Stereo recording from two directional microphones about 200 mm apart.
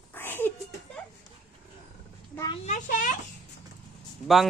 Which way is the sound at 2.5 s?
35° left (ahead or behind).